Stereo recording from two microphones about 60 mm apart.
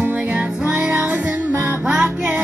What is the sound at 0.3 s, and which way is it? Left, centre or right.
Music, centre.